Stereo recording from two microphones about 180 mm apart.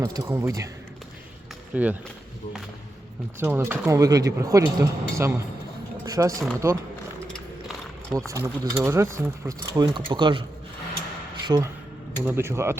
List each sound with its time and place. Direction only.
0.0 s speech: 15° right (ahead or behind)
1.7 s speech: 10° right (ahead or behind)
3.4 s speech: 10° right (ahead or behind)
8.3 s speech: 15° right (ahead or behind)
11.4 s speech: 20° right (ahead or behind)